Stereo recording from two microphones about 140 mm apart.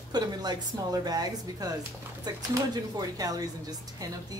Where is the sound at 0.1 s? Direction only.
30° right (ahead or behind).